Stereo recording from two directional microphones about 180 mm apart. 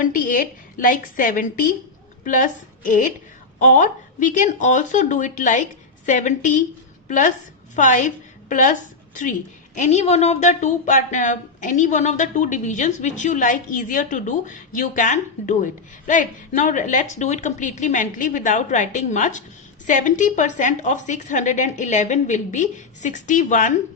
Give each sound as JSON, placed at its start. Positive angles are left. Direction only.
{"t": 0.0, "sound": "a woman's voice", "side_deg": 50}